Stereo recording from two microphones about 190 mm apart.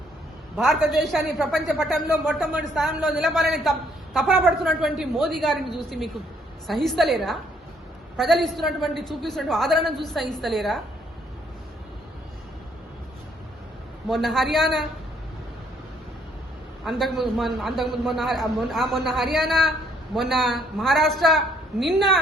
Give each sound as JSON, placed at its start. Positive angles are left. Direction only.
{"t": 0.5, "sound": "a woman's voice", "side_deg": 0}
{"t": 6.7, "sound": "a woman's voice", "side_deg": 0}
{"t": 14.1, "sound": "a woman's voice", "side_deg": 0}
{"t": 16.8, "sound": "a woman's voice", "side_deg": 0}